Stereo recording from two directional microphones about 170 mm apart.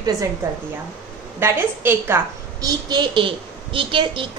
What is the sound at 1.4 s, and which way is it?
A woman's voice, 15° right (ahead or behind).